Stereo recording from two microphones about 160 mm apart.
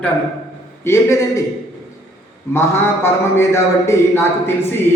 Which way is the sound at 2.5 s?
15° left (ahead or behind).